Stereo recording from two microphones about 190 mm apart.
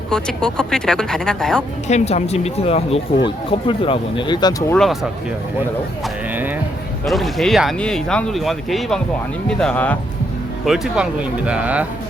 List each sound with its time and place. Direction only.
0.1 s speech: 5° left (ahead or behind)
1.9 s speech: 35° left (ahead or behind)
4.7 s speech: centre (ahead or behind)
7.0 s speech: centre (ahead or behind)
10.7 s speech: 5° right (ahead or behind)